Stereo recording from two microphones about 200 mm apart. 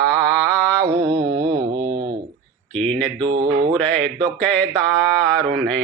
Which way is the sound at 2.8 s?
5° left (ahead or behind).